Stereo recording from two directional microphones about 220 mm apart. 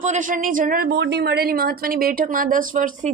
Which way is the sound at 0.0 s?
35° right (ahead or behind).